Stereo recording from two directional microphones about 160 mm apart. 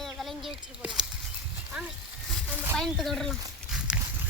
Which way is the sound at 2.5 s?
10° right (ahead or behind).